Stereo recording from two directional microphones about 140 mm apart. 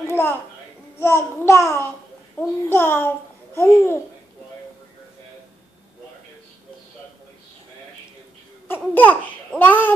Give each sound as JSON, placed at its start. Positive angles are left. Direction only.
{"t": 0.9, "sound": "babbling", "side_deg": 15}
{"t": 8.6, "sound": "babbling", "side_deg": 15}